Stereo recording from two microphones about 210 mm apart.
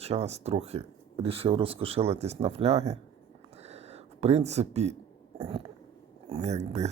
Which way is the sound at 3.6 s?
30° right (ahead or behind).